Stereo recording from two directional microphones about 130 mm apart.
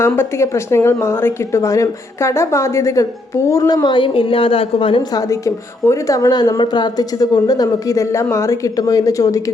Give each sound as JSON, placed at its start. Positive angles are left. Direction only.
{"t": 0.0, "sound": "a woman's voice", "side_deg": 20}
{"t": 3.8, "sound": "a woman's voice", "side_deg": 40}
{"t": 5.1, "sound": "a woman's voice", "side_deg": 25}